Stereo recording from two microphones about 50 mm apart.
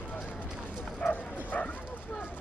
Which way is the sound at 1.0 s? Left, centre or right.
Left.